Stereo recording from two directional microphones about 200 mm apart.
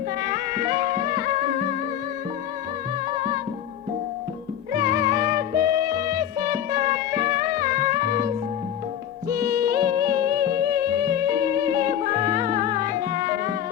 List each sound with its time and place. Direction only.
0.2 s music: 20° right (ahead or behind)
3.2 s music: 20° right (ahead or behind)
4.7 s music: 20° right (ahead or behind)
9.3 s music: 15° right (ahead or behind)